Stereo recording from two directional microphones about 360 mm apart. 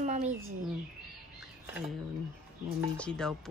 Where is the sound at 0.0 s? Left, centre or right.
Centre.